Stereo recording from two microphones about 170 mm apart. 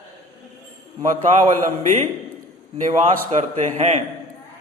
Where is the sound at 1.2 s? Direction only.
45° right (ahead or behind).